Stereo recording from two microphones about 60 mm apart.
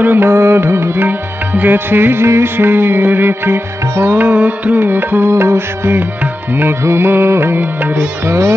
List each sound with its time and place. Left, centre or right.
0.0 s music: right
0.3 s music: right
1.0 s music: right
5.3 s music: right
8.3 s music: right